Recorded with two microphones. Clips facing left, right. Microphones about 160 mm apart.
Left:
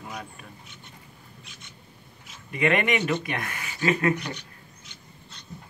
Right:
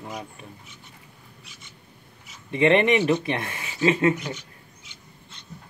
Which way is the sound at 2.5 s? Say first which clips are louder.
Right 5 dB; 25° right (ahead or behind).